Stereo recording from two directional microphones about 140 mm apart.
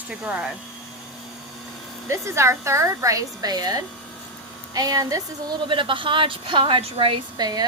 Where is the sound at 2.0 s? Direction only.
20° right (ahead or behind).